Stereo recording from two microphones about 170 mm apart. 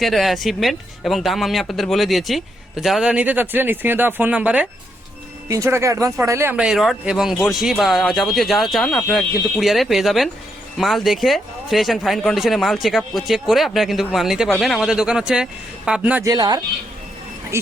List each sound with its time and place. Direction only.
0.0 s speech: centre (ahead or behind)
16.2 s speech: 25° right (ahead or behind)